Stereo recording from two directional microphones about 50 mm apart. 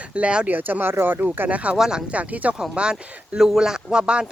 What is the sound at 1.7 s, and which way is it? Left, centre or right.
Speech, centre.